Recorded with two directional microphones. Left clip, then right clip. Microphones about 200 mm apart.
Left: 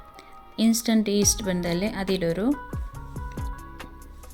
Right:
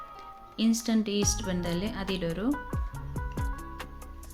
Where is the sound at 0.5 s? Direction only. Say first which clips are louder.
Left 5 dB; 35° left (ahead or behind).